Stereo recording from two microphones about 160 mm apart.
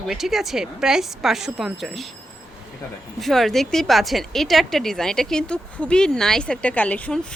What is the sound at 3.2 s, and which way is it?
Speech, centre (ahead or behind).